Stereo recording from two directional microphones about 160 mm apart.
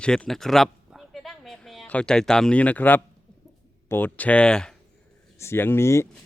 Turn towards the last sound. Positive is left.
turn(degrees=15)  # may be behind; listen again after turning